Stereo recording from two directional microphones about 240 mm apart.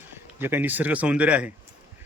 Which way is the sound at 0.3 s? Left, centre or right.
Centre.